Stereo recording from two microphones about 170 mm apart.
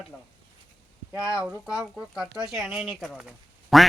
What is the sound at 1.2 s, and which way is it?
Speech, 20° left (ahead or behind).